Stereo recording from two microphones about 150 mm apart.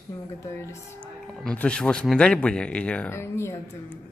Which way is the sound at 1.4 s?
5° left (ahead or behind).